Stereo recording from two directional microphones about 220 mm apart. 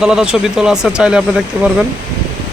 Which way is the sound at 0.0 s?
5° right (ahead or behind).